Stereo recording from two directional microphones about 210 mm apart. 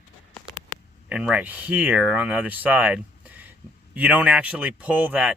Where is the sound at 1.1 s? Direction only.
5° right (ahead or behind).